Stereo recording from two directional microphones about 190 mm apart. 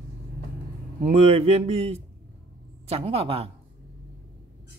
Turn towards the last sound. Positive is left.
turn(degrees=-30)  # may be behind; listen again after turning